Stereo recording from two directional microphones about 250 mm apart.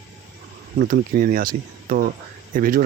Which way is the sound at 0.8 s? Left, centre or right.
Right.